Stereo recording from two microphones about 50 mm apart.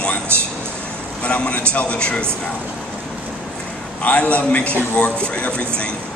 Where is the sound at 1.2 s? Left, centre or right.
Left.